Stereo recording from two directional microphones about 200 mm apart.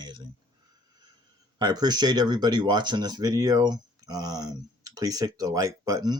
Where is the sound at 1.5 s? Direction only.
20° right (ahead or behind).